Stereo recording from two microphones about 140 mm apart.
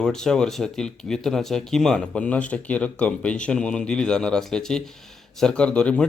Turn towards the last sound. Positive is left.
turn(degrees=10)  # may be behind; listen again after turning